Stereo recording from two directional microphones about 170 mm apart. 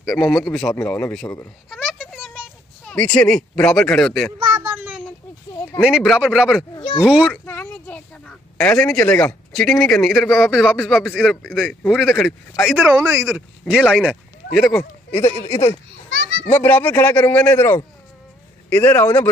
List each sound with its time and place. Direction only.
0.0 s a man's voice: 20° left (ahead or behind)
0.3 s speech: 5° left (ahead or behind)
1.7 s a sound: centre (ahead or behind)
2.8 s speech: 5° left (ahead or behind)
4.4 s a sound: 25° right (ahead or behind)
5.8 s speech: 5° right (ahead or behind)
6.7 s a sound: 25° left (ahead or behind)
7.1 s speech: 5° right (ahead or behind)
7.4 s a sound: 10° left (ahead or behind)
9.5 s speech: 5° left (ahead or behind); by 13.2 s 15° right (ahead or behind)
13.2 s speech: centre (ahead or behind)
14.8 s speech: 10° left (ahead or behind)
16.4 s speech: 10° left (ahead or behind)